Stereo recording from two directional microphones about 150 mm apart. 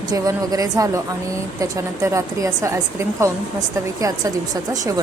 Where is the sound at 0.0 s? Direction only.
25° right (ahead or behind).